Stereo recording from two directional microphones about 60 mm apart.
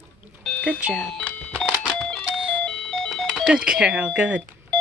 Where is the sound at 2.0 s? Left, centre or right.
Centre.